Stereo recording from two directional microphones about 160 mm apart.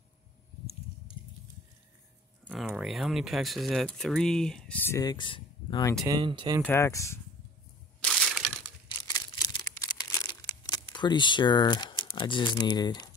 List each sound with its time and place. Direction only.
2.5 s speech: 5° right (ahead or behind); by 5.9 s 25° left (ahead or behind)
6.0 s speech: 30° right (ahead or behind)
6.6 s speech: 15° left (ahead or behind)
8.0 s crushing: 5° left (ahead or behind)
8.8 s crumpling: 25° left (ahead or behind)
10.1 s speech: 25° left (ahead or behind)